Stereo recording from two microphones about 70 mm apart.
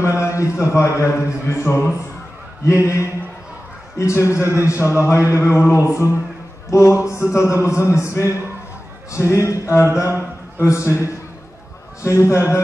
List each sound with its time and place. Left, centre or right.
0.0 s speech: left
2.6 s speech: left
4.0 s speech: left